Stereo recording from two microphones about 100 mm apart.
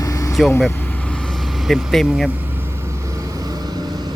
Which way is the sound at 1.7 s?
Centre (ahead or behind).